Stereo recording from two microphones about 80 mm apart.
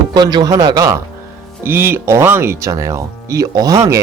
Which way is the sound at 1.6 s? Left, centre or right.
Right.